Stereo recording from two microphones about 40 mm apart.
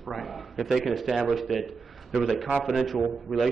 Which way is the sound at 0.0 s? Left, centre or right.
Centre.